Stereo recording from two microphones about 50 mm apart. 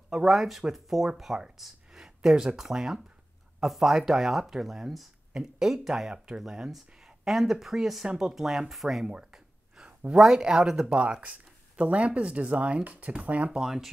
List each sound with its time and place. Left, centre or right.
0.1 s speech: centre
9.1 s a sound: centre
10.1 s speech: centre; by 13.5 s right
13.5 s speech: centre